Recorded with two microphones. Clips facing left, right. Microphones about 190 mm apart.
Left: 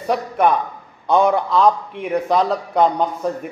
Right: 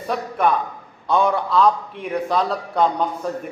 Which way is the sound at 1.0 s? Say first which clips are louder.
Left 3 dB; 20° left (ahead or behind).